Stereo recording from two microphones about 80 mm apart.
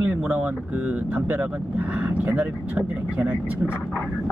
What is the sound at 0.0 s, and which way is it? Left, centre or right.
Speech, centre.